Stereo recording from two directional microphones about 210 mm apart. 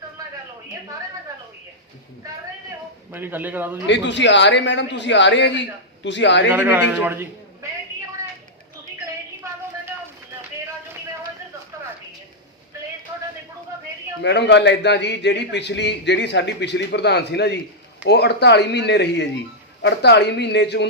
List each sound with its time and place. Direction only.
3.1 s a man's voice: 10° right (ahead or behind)
3.8 s a man's voice: 60° left (ahead or behind)
6.5 s a man's voice: 10° right (ahead or behind)
13.1 s a sound: 15° right (ahead or behind)
14.2 s a man's voice: 55° left (ahead or behind)